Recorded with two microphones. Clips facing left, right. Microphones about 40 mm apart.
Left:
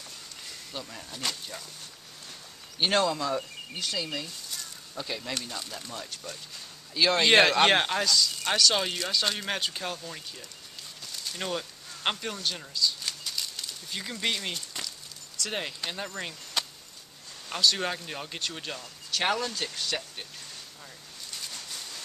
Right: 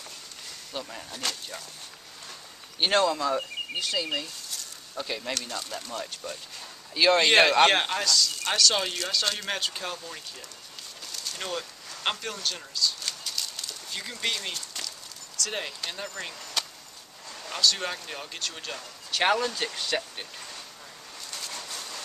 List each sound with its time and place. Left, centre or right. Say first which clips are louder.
0.7 s speech: right 4 dB; centre
2.8 s speech: right 2 dB; centre
11.2 s speech: left 1 dB; centre
12.8 s typewriter: even; centre
13.9 s speech: even; centre
16.6 s chop: even; centre
17.5 s speech: even; centre
19.0 s speech: right 4 dB; centre
21.5 s rain: right 3 dB; right